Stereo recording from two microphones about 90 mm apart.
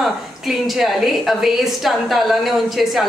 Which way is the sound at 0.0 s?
Centre (ahead or behind).